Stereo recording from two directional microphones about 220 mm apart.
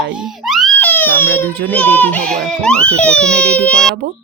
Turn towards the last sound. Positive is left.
turn(degrees=5)  # may be behind; listen again after turning